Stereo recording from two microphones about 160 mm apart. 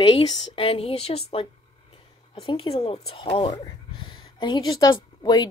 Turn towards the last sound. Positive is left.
turn(degrees=25)  # may be behind; listen again after turning